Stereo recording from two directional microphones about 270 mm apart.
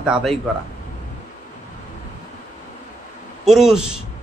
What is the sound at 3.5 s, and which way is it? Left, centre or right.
Speech, centre.